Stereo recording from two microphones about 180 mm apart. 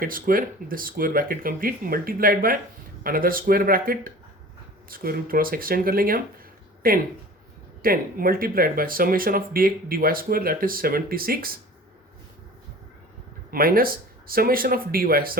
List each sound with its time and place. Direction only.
0.0 s speech: 55° right (ahead or behind)
7.8 s speech: 55° right (ahead or behind)
13.5 s speech: 55° right (ahead or behind)